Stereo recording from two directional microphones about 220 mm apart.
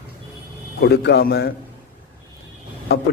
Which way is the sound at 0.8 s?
50° left (ahead or behind).